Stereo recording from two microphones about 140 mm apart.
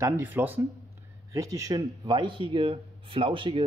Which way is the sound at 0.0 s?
15° right (ahead or behind).